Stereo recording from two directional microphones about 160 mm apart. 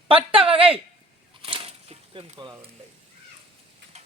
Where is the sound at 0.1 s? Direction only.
35° right (ahead or behind).